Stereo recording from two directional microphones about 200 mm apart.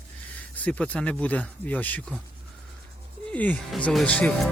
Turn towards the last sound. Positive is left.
turn(degrees=5)  # may be behind; listen again after turning